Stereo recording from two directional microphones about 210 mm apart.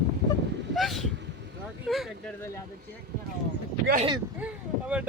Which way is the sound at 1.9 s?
Centre (ahead or behind).